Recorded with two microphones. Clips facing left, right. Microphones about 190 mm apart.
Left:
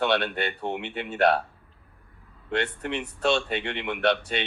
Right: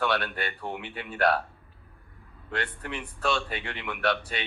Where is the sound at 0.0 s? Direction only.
25° left (ahead or behind).